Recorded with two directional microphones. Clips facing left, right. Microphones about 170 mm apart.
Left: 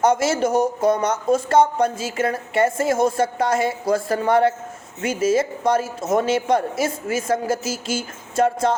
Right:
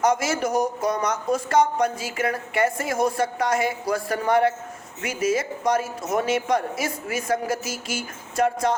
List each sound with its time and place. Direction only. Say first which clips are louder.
0.0 s speech: left 4 dB; 25° left (ahead or behind)